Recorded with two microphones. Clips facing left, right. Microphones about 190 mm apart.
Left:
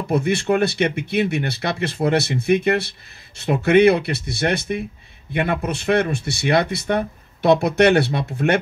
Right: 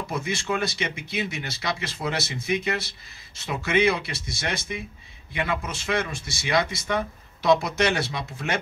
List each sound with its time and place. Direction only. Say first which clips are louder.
0.1 s speech: left 11 dB; 60° left (ahead or behind)